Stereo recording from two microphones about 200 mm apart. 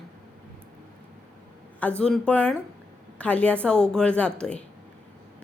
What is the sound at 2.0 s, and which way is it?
A woman's voice, 5° left (ahead or behind).